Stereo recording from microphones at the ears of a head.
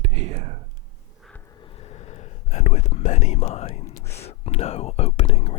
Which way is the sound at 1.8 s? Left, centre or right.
Left.